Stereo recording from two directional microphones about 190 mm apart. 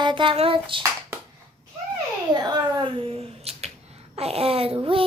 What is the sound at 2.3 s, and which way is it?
Speech, 20° right (ahead or behind).